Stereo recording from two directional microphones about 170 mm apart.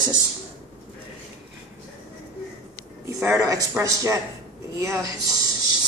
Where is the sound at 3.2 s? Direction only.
20° right (ahead or behind).